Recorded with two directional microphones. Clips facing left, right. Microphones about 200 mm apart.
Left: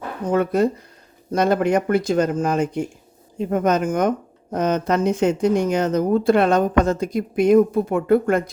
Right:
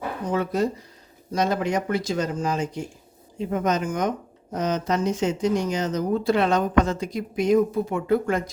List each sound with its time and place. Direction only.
0.3 s speech: 55° left (ahead or behind)